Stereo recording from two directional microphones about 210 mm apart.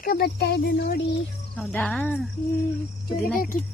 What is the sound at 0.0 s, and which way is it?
Speech, 45° left (ahead or behind).